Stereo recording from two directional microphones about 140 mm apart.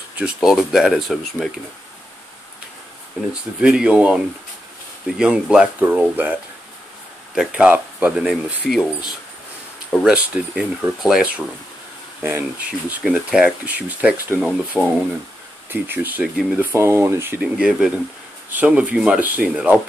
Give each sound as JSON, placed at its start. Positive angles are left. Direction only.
{"t": 0.2, "sound": "speech", "side_deg": -5}
{"t": 3.6, "sound": "speech", "side_deg": -5}
{"t": 7.3, "sound": "speech", "side_deg": -5}
{"t": 10.0, "sound": "speech", "side_deg": -5}
{"t": 16.7, "sound": "speech", "side_deg": -20}